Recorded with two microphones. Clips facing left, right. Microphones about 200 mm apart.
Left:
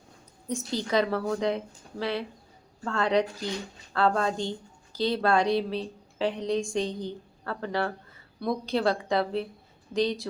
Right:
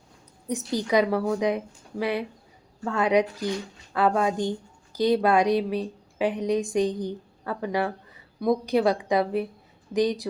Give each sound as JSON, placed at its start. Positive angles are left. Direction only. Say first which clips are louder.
{"t": 0.9, "sound": "a woman's voice", "louder": "right 4 dB", "side_deg": -15}